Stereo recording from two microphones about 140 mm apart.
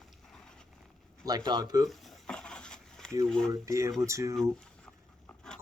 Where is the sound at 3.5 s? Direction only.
20° right (ahead or behind).